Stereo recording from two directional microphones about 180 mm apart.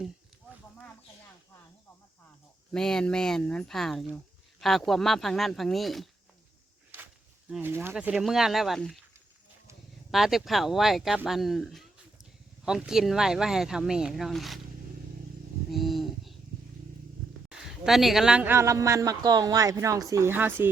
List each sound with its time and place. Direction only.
2.7 s speech: 5° left (ahead or behind)
7.5 s a woman's voice: 10° right (ahead or behind)
10.1 s speech: centre (ahead or behind)
15.7 s a sound: centre (ahead or behind)
17.5 s a woman's voice: centre (ahead or behind)